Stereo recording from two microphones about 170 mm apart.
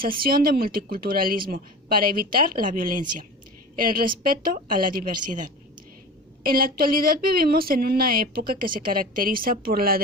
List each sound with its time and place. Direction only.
0.0 s speech: 60° right (ahead or behind)